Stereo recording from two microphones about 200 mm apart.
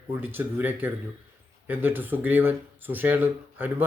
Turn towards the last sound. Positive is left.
turn(degrees=-10)  # may be behind; listen again after turning